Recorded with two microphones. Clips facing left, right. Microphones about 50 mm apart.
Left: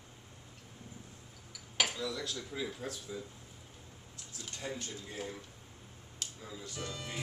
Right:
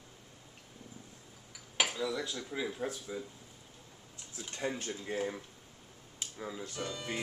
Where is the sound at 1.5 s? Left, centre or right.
Centre.